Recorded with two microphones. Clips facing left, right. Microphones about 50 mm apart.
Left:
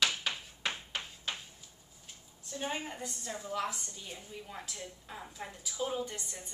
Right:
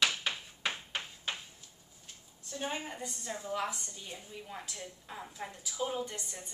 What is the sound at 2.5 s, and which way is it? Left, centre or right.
A woman's voice, centre.